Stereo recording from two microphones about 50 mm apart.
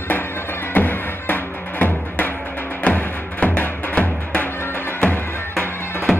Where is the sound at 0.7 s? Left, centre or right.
Left.